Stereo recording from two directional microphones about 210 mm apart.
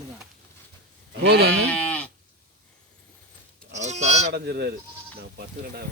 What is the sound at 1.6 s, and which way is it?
Livestock, 5° left (ahead or behind).